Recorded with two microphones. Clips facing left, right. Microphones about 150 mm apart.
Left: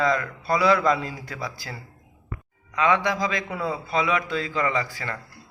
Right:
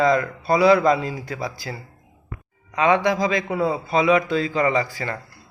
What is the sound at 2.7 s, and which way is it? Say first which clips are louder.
A man's voice: right 4 dB; 25° right (ahead or behind).